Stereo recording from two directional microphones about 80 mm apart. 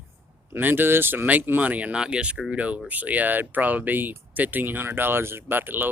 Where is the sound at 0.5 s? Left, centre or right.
Right.